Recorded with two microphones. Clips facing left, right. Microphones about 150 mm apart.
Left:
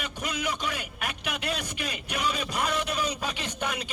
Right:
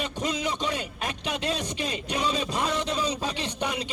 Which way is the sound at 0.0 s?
25° right (ahead or behind).